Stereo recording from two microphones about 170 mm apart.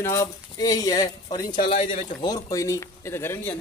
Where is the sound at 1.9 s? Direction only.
50° left (ahead or behind).